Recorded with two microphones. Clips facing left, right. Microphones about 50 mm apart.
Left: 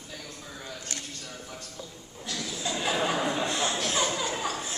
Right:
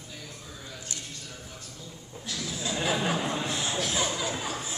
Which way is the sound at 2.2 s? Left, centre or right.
Centre.